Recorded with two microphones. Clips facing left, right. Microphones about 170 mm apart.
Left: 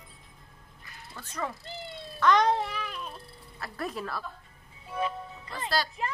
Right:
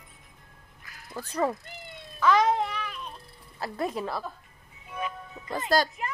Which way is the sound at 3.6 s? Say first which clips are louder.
Right 5 dB; 25° right (ahead or behind).